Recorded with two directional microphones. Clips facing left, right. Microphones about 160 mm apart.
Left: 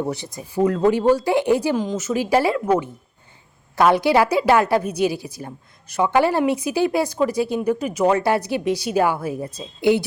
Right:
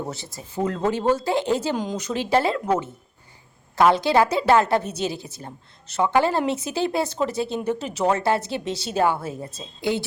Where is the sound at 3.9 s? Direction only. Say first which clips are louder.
Left 3 dB; 15° left (ahead or behind).